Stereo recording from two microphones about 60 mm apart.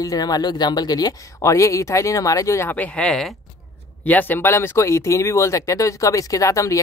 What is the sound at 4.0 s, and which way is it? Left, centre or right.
Speech, left.